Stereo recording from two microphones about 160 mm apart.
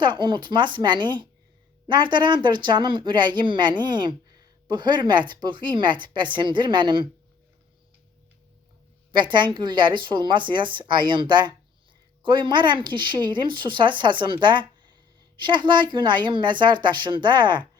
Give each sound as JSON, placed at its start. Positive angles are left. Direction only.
{"t": 0.0, "sound": "a woman's voice", "side_deg": -30}
{"t": 9.1, "sound": "a woman's voice", "side_deg": -30}